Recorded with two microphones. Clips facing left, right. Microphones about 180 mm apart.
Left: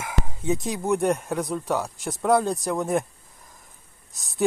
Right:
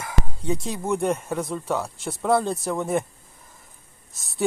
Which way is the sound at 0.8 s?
Centre (ahead or behind).